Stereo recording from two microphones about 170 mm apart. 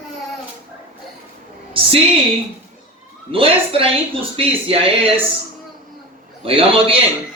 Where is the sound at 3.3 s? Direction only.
35° right (ahead or behind).